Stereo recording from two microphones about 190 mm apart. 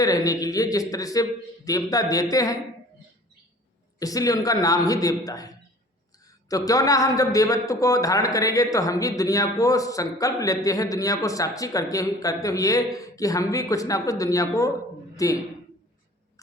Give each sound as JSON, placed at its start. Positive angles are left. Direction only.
{"t": 0.0, "sound": "a man's voice", "side_deg": 20}
{"t": 4.0, "sound": "a man's voice", "side_deg": 20}
{"t": 6.5, "sound": "a man's voice", "side_deg": 20}